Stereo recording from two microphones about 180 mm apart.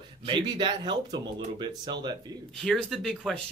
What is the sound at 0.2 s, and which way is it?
Speech, 25° right (ahead or behind).